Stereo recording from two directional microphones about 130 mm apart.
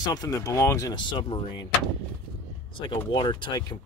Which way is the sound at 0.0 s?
30° left (ahead or behind).